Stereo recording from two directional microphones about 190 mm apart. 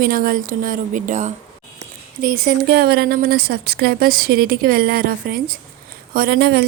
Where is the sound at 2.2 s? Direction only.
55° right (ahead or behind).